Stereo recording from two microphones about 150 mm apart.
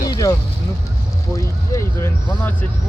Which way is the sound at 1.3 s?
20° left (ahead or behind).